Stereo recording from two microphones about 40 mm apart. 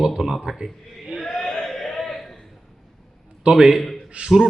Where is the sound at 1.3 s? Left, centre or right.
Centre.